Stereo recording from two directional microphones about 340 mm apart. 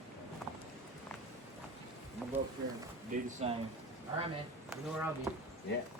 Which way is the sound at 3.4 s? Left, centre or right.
Centre.